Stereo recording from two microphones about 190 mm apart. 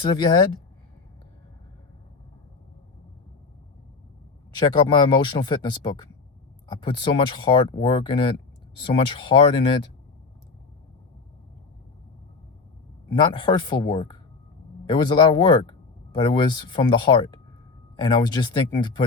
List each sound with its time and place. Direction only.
0.0 s speech: 25° left (ahead or behind)
4.5 s speech: 25° left (ahead or behind)
13.1 s speech: 25° left (ahead or behind)